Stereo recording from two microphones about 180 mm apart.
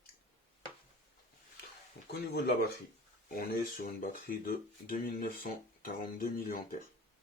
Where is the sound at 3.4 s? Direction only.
55° left (ahead or behind).